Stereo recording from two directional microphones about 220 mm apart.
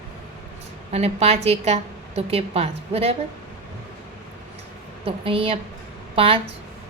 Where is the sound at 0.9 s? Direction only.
30° right (ahead or behind).